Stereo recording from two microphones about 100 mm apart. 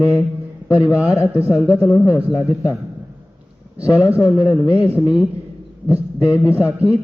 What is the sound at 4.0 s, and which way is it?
A man's voice, 15° right (ahead or behind).